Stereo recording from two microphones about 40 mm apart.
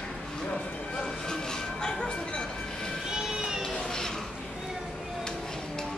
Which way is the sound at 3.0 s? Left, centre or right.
Centre.